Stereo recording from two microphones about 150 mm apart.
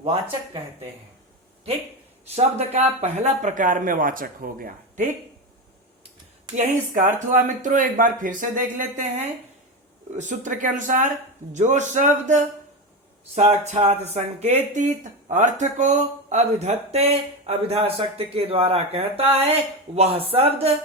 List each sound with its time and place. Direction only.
0.0 s speech: 35° right (ahead or behind)
2.3 s speech: 50° right (ahead or behind); by 5.0 s 70° right (ahead or behind)
6.5 s speech: 55° right (ahead or behind)
10.2 s speech: 55° right (ahead or behind); by 20.7 s 40° right (ahead or behind)